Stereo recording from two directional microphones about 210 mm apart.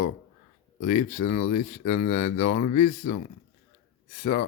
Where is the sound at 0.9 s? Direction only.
35° left (ahead or behind).